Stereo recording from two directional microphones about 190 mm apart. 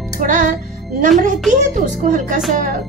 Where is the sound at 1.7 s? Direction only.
40° right (ahead or behind).